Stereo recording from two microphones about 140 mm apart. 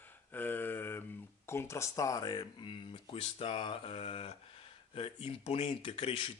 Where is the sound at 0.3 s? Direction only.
15° left (ahead or behind).